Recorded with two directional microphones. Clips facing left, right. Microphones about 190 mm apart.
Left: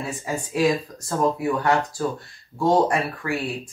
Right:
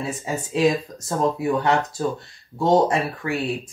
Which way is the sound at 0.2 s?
20° right (ahead or behind).